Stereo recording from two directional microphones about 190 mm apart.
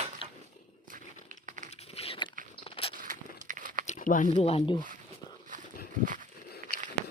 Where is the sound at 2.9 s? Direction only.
45° right (ahead or behind).